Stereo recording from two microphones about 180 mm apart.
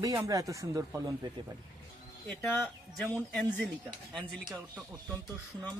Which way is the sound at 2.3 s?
Centre (ahead or behind).